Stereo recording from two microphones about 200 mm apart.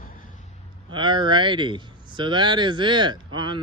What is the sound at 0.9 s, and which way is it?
Speech, 25° right (ahead or behind).